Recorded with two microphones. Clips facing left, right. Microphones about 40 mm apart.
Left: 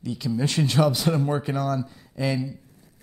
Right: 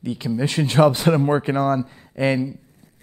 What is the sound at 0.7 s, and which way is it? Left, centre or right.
A man's voice, right.